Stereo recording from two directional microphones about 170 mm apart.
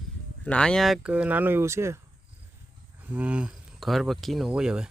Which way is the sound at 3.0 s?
10° right (ahead or behind).